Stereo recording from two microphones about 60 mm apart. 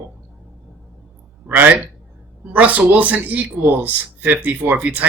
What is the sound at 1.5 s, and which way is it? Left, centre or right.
Speech, right.